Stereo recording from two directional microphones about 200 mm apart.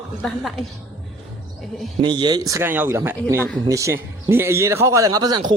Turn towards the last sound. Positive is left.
turn(degrees=-20)  # may be behind; listen again after turning